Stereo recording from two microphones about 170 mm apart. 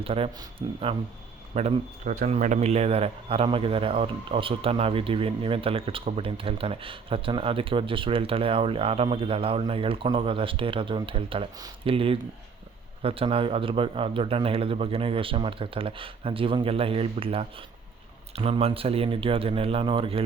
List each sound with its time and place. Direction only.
0.0 s speech: 35° right (ahead or behind)